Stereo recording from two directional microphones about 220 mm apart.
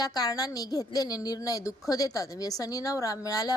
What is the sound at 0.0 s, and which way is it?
A woman's voice, 15° left (ahead or behind).